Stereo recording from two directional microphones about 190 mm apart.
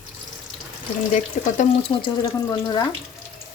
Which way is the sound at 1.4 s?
40° left (ahead or behind).